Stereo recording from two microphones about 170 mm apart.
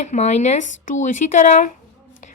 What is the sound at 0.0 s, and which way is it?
A woman's voice, 45° left (ahead or behind).